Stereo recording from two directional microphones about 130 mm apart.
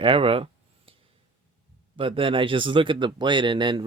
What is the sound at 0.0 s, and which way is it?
Speech, 45° right (ahead or behind).